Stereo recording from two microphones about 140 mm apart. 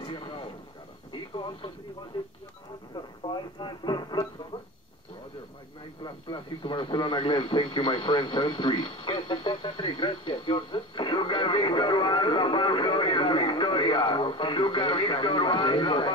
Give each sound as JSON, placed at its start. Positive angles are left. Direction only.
{"t": 0.0, "sound": "vehicle", "side_deg": 35}
{"t": 1.3, "sound": "radio", "side_deg": 35}
{"t": 3.5, "sound": "speech", "side_deg": 30}
{"t": 6.0, "sound": "radio", "side_deg": 35}